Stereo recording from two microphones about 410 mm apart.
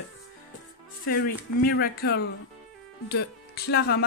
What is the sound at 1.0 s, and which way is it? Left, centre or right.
Speech, left.